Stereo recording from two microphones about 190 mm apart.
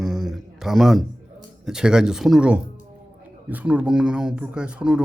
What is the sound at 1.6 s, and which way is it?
Speech, 5° right (ahead or behind).